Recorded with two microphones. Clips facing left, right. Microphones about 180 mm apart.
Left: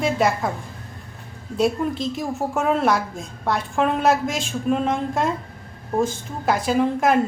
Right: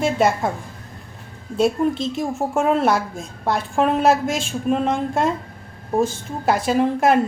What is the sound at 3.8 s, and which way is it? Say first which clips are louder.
Speech: right 2 dB; 30° right (ahead or behind).